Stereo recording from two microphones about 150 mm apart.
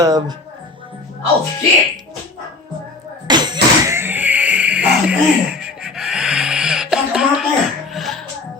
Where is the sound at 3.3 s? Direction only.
30° right (ahead or behind).